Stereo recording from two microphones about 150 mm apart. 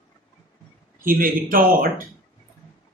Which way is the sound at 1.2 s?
70° right (ahead or behind).